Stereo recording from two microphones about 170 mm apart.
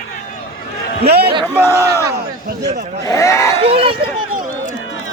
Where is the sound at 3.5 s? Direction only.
35° right (ahead or behind).